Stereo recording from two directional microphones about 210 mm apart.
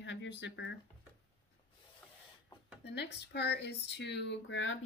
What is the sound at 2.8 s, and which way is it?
Speech, 55° left (ahead or behind).